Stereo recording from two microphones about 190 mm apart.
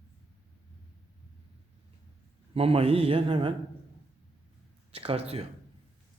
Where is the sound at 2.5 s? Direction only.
30° right (ahead or behind).